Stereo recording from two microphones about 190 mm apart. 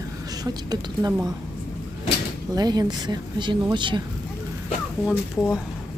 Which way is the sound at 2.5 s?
20° right (ahead or behind).